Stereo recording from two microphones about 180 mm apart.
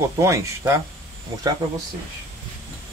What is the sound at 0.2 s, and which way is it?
Speech, 15° right (ahead or behind).